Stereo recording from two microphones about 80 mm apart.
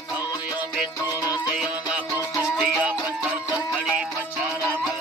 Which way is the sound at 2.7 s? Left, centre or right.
Right.